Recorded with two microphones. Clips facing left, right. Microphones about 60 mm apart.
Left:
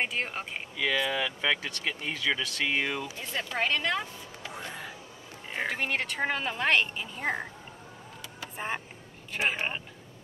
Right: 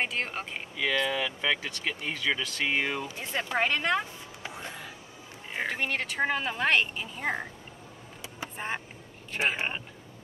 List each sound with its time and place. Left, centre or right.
0.0 s speech: centre
3.2 s speech: right
4.5 s a sound: centre
5.5 s speech: centre
8.5 s speech: centre